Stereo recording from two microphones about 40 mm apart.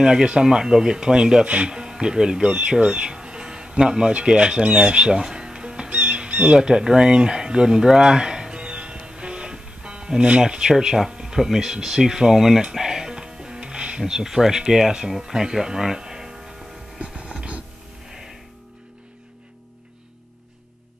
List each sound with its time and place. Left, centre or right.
0.0 s speech: right
5.9 s music: right
10.4 s speech: centre
12.7 s music: centre
17.0 s a sound: right